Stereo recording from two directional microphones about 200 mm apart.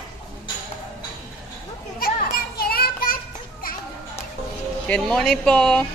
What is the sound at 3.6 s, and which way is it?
Children playing, 45° left (ahead or behind).